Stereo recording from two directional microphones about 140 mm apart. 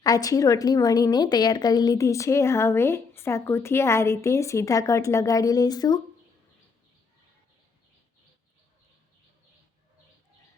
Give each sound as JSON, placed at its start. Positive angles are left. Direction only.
{"t": 0.0, "sound": "a woman's voice", "side_deg": 25}